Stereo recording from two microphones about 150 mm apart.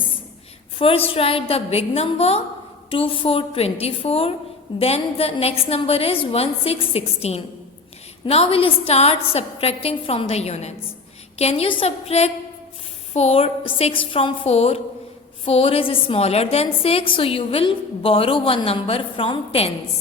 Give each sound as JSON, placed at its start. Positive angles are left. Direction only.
{"t": 0.8, "sound": "a woman's voice", "side_deg": 40}